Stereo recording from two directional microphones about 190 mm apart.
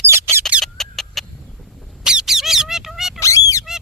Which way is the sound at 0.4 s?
Centre (ahead or behind).